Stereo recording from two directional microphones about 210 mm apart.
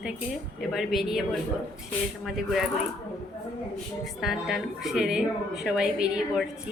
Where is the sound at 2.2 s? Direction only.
Centre (ahead or behind).